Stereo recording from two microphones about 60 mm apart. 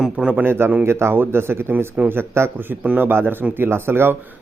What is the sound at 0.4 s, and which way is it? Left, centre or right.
Speech, right.